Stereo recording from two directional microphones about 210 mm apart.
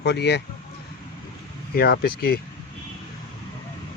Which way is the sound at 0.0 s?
55° left (ahead or behind).